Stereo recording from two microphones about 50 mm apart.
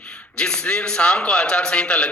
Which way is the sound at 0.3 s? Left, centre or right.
Centre.